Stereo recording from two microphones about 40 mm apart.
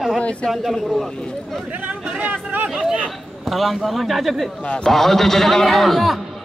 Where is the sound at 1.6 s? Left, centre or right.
Right.